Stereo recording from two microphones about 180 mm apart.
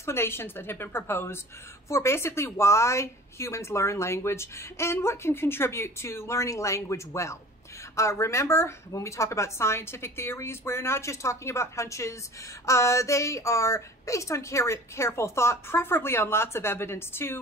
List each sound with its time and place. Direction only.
0.0 s a woman's voice: 15° left (ahead or behind)